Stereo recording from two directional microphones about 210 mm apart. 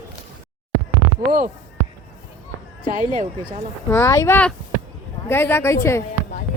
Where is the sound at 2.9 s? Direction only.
40° right (ahead or behind).